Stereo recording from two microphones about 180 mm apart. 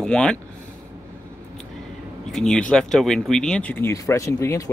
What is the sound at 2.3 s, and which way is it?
Speech, 5° left (ahead or behind).